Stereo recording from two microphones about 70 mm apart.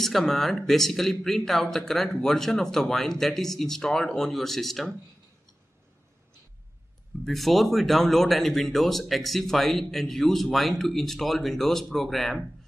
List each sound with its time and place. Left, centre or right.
0.0 s speech: centre
7.2 s speech: centre